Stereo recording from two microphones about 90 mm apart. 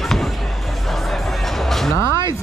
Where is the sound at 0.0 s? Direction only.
Centre (ahead or behind).